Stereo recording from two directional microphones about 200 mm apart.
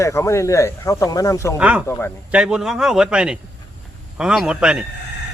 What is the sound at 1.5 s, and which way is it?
A man's voice, 5° right (ahead or behind).